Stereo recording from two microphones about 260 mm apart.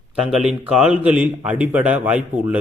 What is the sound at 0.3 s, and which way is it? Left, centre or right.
Speech, centre.